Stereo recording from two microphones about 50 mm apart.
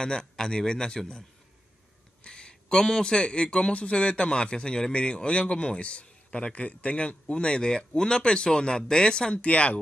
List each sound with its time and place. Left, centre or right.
0.0 s a man's voice: centre
2.2 s speech: centre